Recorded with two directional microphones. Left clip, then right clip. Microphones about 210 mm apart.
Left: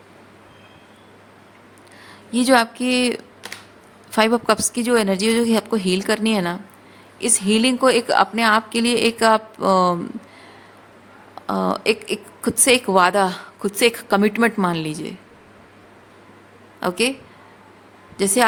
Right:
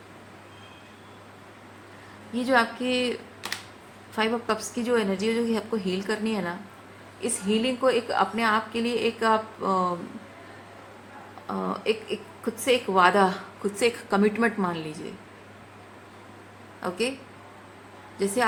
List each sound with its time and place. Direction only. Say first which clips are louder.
2.3 s a woman's voice: left 7 dB; 55° left (ahead or behind)
11.4 s a woman's voice: left 8 dB; 55° left (ahead or behind)